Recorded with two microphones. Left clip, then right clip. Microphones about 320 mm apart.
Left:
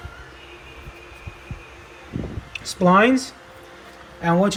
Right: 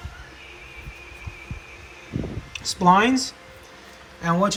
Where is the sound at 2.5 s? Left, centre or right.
Centre.